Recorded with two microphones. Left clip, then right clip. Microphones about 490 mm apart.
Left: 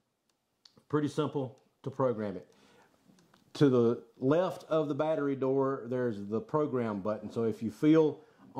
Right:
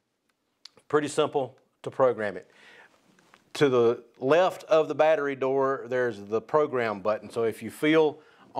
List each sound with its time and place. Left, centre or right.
0.7 s speech: right
3.5 s speech: right